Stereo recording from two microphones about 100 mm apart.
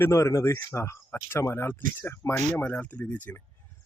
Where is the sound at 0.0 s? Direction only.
25° left (ahead or behind).